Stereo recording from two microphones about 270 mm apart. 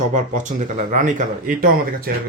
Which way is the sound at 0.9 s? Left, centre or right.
Right.